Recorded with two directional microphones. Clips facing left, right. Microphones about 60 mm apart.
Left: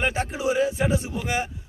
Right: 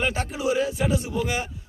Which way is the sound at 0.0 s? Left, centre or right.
Left.